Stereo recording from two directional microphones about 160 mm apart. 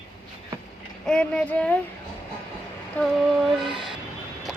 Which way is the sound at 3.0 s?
10° left (ahead or behind).